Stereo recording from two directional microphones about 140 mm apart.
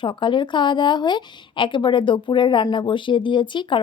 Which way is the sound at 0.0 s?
35° left (ahead or behind).